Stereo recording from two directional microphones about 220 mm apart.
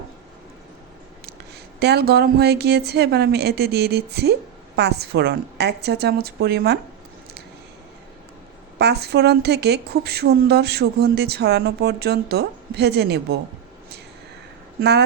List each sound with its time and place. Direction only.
1.8 s a woman's voice: 45° right (ahead or behind)
8.8 s a woman's voice: 50° right (ahead or behind)
14.8 s a woman's voice: 50° right (ahead or behind)